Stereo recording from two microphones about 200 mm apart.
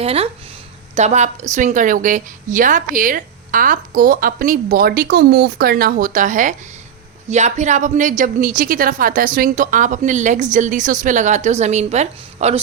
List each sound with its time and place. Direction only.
0.0 s a woman's voice: 30° right (ahead or behind)